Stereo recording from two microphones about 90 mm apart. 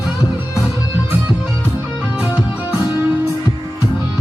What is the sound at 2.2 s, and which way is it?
Music, 15° right (ahead or behind).